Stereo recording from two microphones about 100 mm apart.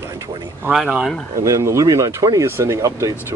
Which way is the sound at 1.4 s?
30° right (ahead or behind).